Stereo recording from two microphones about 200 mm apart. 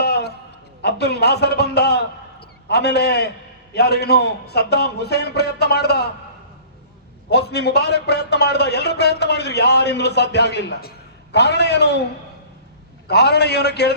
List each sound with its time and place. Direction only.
0.0 s a sound: 55° left (ahead or behind)
0.8 s a man's voice: 55° left (ahead or behind)
7.3 s a man's voice: 55° left (ahead or behind)
13.1 s a man's voice: 55° left (ahead or behind)